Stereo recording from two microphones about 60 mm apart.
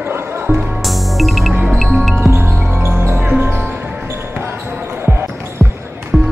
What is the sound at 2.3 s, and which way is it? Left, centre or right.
Music, right.